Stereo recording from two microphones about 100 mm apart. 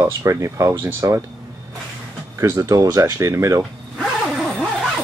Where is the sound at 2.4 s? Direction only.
35° right (ahead or behind).